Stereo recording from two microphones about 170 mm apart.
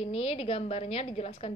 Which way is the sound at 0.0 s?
35° left (ahead or behind).